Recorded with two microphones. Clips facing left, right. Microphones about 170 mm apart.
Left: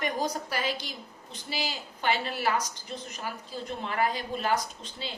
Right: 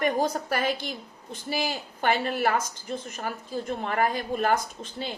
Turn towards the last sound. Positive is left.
turn(degrees=-50)  # may be behind; listen again after turning